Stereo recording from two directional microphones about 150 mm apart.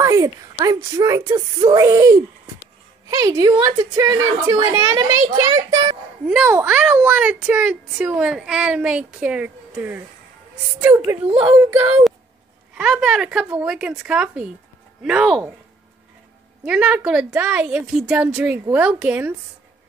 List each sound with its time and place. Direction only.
0.0 s a sound: 20° right (ahead or behind)
0.9 s a woman's voice: 20° right (ahead or behind)
6.2 s a child's voice: 5° right (ahead or behind)
16.6 s a child's voice: 5° right (ahead or behind)